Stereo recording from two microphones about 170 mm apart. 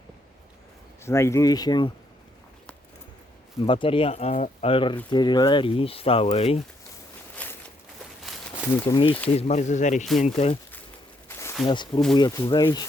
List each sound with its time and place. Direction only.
1.0 s speech: 15° left (ahead or behind)
3.6 s speech: 30° left (ahead or behind)
9.3 s speech: 40° left (ahead or behind)
11.3 s a sound: 15° left (ahead or behind)
11.6 s speech: 30° left (ahead or behind)